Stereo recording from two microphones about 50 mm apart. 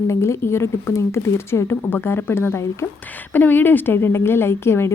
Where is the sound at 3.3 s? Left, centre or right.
Left.